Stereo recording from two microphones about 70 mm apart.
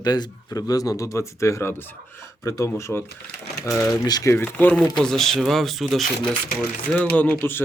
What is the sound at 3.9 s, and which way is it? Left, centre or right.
Speech, left.